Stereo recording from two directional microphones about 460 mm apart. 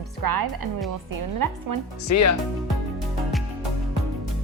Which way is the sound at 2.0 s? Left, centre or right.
Left.